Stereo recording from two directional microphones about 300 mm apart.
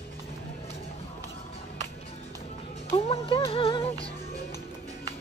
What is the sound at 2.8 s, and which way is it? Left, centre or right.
Music, centre.